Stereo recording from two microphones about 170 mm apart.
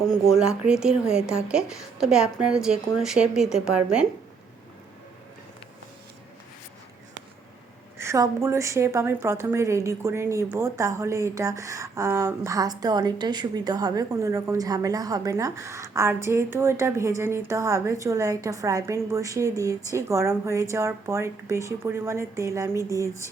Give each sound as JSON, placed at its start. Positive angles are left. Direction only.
{"t": 0.3, "sound": "a woman's voice", "side_deg": -5}
{"t": 7.9, "sound": "a woman's voice", "side_deg": -15}